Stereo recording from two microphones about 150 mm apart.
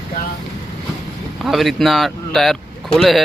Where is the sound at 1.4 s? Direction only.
Centre (ahead or behind).